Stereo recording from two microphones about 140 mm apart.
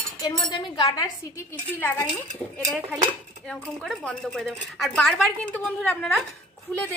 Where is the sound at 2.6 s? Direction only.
Centre (ahead or behind).